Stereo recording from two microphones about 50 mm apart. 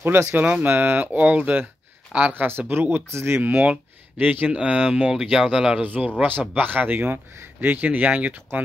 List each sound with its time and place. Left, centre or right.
0.0 s speech: right
0.4 s speech: right
2.3 s speech: right
3.1 s speech: right
3.4 s speech: right
5.8 s speech: right